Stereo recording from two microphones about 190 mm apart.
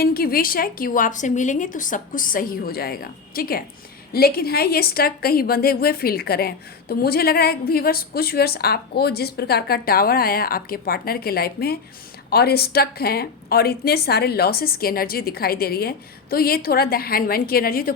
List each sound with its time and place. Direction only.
0.0 s a woman's voice: 50° left (ahead or behind)